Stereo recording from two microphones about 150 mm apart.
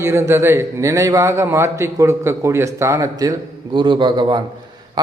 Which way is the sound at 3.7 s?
35° right (ahead or behind).